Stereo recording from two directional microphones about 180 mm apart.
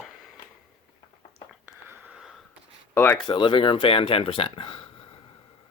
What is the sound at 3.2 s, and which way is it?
Speech, 25° left (ahead or behind).